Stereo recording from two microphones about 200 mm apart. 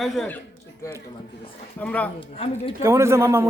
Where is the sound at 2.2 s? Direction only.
30° left (ahead or behind).